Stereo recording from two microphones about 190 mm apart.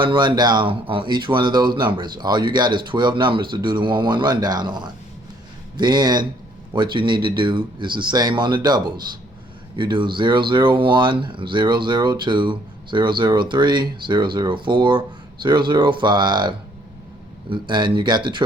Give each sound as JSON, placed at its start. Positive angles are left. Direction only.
{"t": 0.0, "sound": "speech", "side_deg": -25}